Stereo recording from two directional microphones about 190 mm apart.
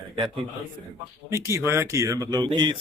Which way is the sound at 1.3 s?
15° right (ahead or behind).